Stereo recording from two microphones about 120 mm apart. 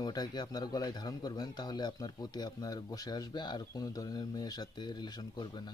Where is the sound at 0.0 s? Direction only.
35° left (ahead or behind).